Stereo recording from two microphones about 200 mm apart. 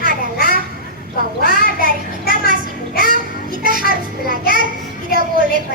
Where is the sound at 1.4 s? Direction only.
45° left (ahead or behind).